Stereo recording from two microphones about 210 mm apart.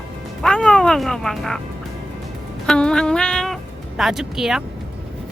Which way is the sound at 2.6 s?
5° left (ahead or behind).